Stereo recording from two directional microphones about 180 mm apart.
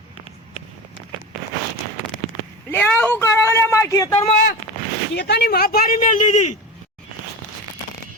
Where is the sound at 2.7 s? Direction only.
10° left (ahead or behind).